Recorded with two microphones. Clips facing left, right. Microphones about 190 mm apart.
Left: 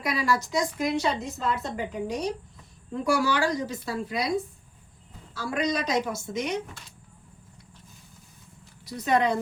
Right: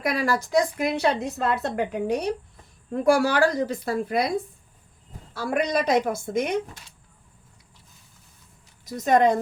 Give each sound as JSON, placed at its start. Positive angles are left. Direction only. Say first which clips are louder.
{"t": 0.0, "sound": "a woman's voice", "louder": "right 2 dB", "side_deg": -55}
{"t": 5.3, "sound": "a woman's voice", "louder": "right 3 dB", "side_deg": -55}
{"t": 8.8, "sound": "speech", "louder": "right 5 dB", "side_deg": -45}